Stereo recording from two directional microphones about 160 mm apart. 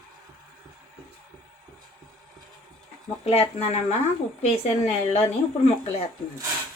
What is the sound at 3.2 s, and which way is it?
Speech, 40° left (ahead or behind).